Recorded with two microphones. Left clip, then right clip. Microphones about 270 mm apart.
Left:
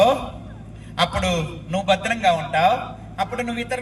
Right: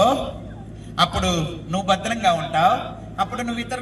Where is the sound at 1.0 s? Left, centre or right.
Left.